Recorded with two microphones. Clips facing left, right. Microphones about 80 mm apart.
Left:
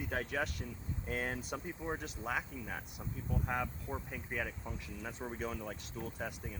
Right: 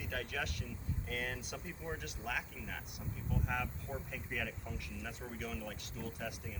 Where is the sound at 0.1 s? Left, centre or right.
Left.